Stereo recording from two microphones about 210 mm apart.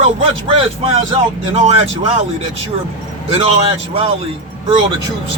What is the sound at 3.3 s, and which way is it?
Speech, 30° right (ahead or behind).